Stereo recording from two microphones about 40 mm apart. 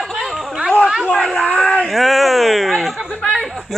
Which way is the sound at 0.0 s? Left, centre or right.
Centre.